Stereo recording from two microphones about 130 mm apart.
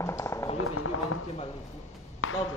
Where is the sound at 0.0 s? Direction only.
25° left (ahead or behind).